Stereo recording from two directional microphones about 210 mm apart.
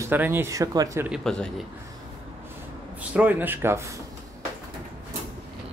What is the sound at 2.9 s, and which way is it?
Speech, 5° right (ahead or behind).